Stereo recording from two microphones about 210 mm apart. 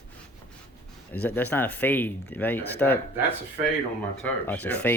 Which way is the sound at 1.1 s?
10° left (ahead or behind).